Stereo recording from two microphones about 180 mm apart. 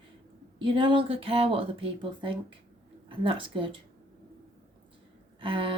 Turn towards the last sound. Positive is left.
turn(degrees=-30)  # may be behind; listen again after turning